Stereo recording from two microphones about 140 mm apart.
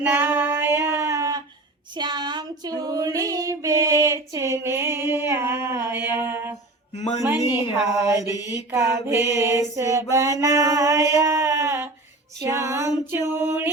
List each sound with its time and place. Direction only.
0.1 s female singing: 15° right (ahead or behind)
6.9 s speech: 50° left (ahead or behind)
7.3 s female singing: 15° right (ahead or behind)
8.7 s mantra: 20° right (ahead or behind)
13.1 s female singing: 15° right (ahead or behind)